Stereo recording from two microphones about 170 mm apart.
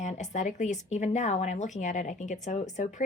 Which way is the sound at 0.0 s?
40° left (ahead or behind).